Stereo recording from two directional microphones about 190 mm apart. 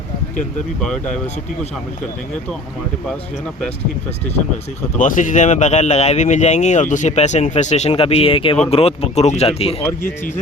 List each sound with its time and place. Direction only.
4.9 s speech: 45° left (ahead or behind)